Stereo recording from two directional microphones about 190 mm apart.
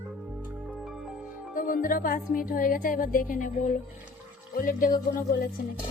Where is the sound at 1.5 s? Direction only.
45° left (ahead or behind).